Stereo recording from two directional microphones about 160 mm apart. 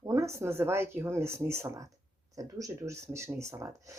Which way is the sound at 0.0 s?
20° right (ahead or behind).